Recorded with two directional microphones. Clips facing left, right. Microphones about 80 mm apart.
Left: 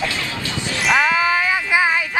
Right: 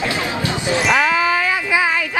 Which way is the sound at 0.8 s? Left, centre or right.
Centre.